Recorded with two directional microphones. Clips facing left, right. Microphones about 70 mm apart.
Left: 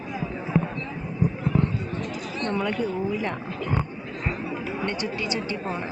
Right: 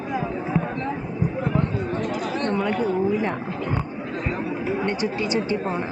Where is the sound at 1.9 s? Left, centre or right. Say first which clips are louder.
Right 6 dB; right.